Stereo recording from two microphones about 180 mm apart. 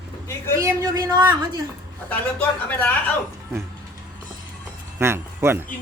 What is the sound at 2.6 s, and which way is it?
Speech, 10° left (ahead or behind).